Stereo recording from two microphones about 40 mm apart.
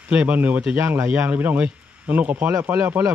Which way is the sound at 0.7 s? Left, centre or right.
Right.